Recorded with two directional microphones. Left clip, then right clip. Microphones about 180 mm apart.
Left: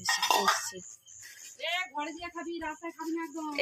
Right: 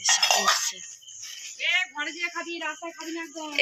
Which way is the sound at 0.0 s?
50° left (ahead or behind).